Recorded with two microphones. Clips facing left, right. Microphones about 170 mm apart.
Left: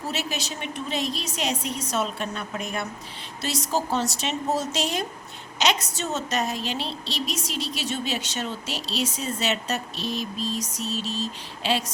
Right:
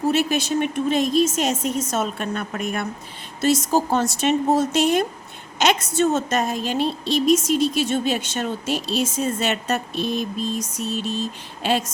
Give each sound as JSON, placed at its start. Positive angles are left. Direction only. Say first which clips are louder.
{"t": 0.1, "sound": "a woman's voice", "louder": "right 10 dB", "side_deg": -55}